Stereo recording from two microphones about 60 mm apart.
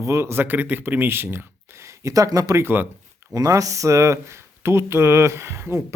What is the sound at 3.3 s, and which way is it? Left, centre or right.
Speech, right.